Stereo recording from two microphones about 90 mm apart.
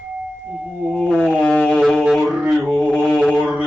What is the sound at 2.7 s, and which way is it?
Mantra, 10° left (ahead or behind).